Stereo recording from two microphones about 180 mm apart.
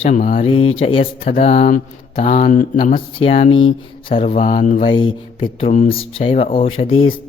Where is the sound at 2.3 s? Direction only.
45° left (ahead or behind).